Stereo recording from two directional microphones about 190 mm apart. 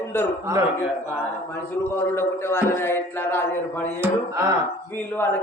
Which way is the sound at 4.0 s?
15° right (ahead or behind).